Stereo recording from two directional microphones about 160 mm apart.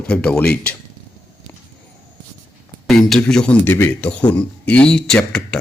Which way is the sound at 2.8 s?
5° left (ahead or behind).